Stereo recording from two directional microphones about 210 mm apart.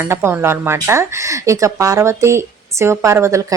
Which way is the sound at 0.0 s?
10° right (ahead or behind).